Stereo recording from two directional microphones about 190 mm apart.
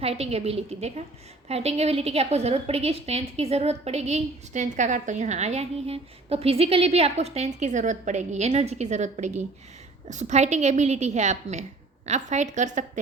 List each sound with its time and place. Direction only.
0.0 s a woman's voice: 30° right (ahead or behind)